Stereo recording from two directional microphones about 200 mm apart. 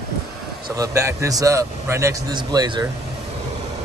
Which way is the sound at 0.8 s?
15° right (ahead or behind).